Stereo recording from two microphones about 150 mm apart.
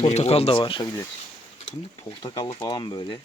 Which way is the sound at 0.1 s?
45° left (ahead or behind).